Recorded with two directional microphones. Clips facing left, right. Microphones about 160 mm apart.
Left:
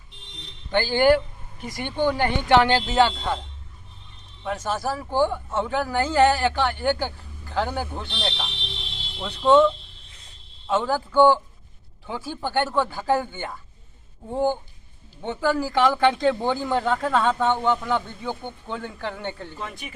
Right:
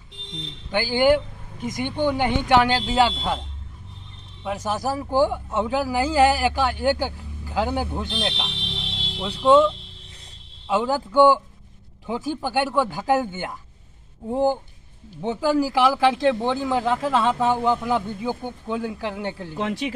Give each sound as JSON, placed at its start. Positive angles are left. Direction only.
{"t": 0.7, "sound": "speech", "side_deg": -10}
{"t": 4.4, "sound": "speech", "side_deg": -15}
{"t": 10.7, "sound": "speech", "side_deg": -15}
{"t": 19.5, "sound": "speech", "side_deg": -90}